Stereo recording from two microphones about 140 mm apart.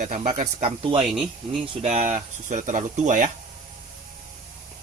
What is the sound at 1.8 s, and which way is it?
Speech, 55° right (ahead or behind).